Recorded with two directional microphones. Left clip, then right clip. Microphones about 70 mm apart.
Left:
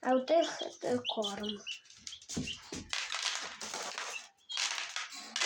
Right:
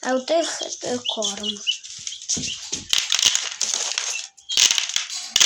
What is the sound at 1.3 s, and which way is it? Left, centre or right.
Speech, centre.